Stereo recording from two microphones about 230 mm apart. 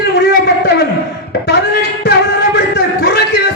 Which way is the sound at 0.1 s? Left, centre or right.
Left.